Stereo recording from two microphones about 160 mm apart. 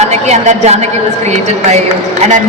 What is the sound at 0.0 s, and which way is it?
A man's voice, 45° right (ahead or behind).